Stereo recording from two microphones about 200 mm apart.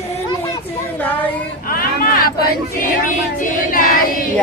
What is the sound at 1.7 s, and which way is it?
Chatter, 45° left (ahead or behind).